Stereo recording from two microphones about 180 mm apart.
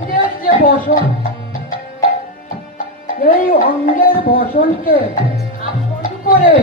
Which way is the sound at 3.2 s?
50° left (ahead or behind).